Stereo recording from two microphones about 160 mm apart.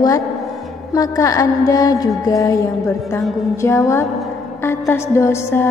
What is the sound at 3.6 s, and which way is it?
Music, 20° left (ahead or behind).